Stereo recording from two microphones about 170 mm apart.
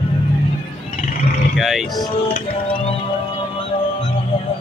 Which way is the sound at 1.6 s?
Centre (ahead or behind).